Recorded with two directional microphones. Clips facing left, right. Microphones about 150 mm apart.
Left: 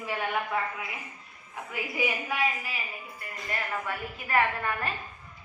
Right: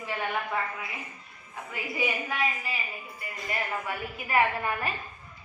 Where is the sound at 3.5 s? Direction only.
10° right (ahead or behind).